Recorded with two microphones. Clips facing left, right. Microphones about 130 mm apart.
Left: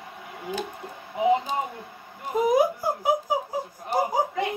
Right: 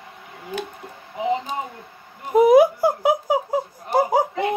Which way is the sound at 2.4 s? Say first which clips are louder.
Right 8 dB; 70° right (ahead or behind).